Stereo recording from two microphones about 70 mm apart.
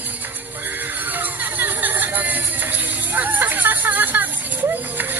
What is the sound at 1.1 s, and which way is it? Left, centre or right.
Music, right.